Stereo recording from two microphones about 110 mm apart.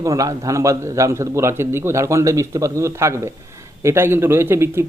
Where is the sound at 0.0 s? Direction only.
30° right (ahead or behind).